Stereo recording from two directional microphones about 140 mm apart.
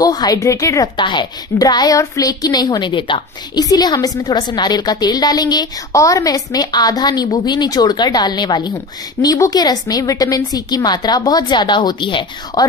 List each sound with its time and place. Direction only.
0.0 s a woman's voice: 25° left (ahead or behind)